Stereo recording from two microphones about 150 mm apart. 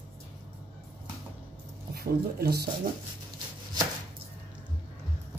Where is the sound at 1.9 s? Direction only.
90° right.